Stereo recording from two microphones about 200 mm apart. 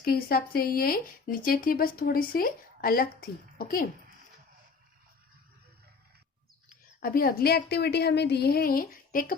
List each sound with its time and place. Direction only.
0.0 s speech: 50° left (ahead or behind)
6.7 s a woman's voice: 45° left (ahead or behind)